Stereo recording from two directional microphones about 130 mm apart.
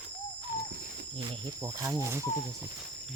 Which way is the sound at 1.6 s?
25° right (ahead or behind).